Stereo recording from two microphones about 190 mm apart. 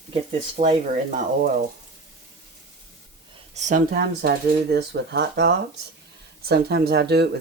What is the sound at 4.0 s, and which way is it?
Speech, 60° right (ahead or behind).